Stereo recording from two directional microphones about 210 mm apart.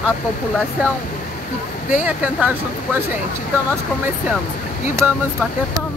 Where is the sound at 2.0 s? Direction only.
5° right (ahead or behind).